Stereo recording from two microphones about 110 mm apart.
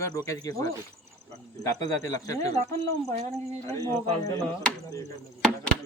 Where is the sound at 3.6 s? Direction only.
30° left (ahead or behind).